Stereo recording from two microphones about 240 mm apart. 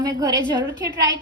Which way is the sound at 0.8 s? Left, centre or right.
Right.